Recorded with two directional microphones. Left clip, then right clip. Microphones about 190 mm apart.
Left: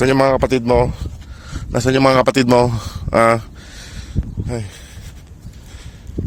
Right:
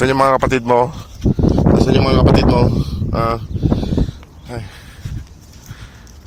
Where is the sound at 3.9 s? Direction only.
65° left (ahead or behind).